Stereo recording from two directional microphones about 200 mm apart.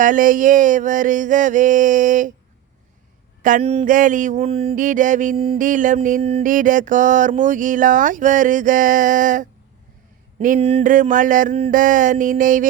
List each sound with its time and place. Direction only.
0.0 s mantra: 40° right (ahead or behind)
3.4 s mantra: 35° right (ahead or behind)